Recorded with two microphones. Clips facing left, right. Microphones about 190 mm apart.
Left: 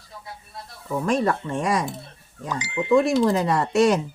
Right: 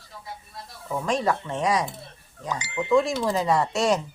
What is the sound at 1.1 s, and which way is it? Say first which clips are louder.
Speech: left 2 dB; 55° left (ahead or behind).